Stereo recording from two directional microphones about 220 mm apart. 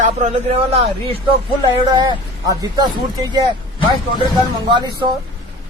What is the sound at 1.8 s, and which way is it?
Speech, 20° right (ahead or behind).